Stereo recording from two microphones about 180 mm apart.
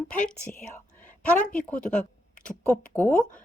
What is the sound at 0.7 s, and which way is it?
Whispering, 10° left (ahead or behind).